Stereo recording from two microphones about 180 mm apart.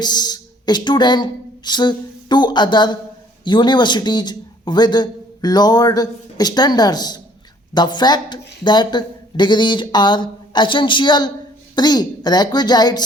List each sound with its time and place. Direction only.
0.0 s a man's voice: 25° left (ahead or behind)